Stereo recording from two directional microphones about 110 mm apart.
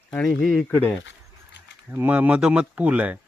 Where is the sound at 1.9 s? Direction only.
15° right (ahead or behind).